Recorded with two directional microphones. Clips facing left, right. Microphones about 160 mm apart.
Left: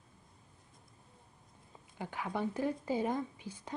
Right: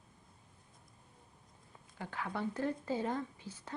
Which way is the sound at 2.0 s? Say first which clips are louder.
Left 2 dB; 15° left (ahead or behind).